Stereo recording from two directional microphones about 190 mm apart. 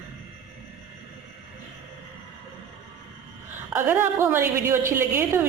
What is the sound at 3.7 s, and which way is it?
A woman's voice, 10° right (ahead or behind).